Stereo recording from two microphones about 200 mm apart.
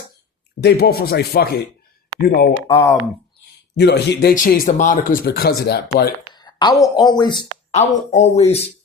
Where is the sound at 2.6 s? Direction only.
20° left (ahead or behind).